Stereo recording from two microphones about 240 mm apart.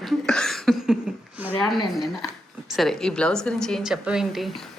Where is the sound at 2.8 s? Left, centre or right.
Centre.